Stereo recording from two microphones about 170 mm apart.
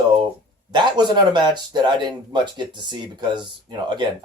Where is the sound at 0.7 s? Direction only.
25° right (ahead or behind).